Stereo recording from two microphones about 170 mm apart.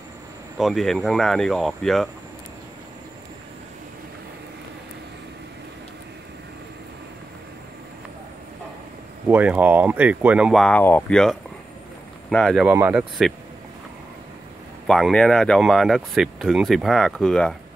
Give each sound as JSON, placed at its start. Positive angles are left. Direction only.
{"t": 0.6, "sound": "speech", "side_deg": 0}
{"t": 9.3, "sound": "speech", "side_deg": -10}
{"t": 12.6, "sound": "speech", "side_deg": -10}
{"t": 14.9, "sound": "speech", "side_deg": 0}